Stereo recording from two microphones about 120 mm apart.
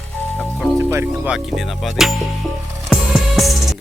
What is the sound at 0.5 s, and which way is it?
Music, centre (ahead or behind).